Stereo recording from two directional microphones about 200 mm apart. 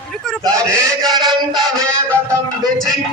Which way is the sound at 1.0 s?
Centre (ahead or behind).